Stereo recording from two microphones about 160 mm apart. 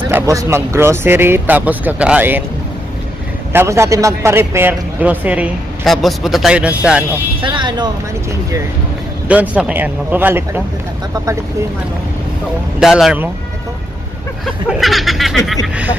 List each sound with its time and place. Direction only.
0.1 s speech: 20° right (ahead or behind)
3.5 s speech: 15° right (ahead or behind)
7.4 s speech: 30° right (ahead or behind)
9.3 s speech: 10° right (ahead or behind)
12.8 s speech: 5° right (ahead or behind)
14.4 s speech: centre (ahead or behind)